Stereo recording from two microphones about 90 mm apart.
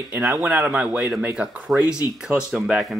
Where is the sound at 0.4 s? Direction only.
20° right (ahead or behind).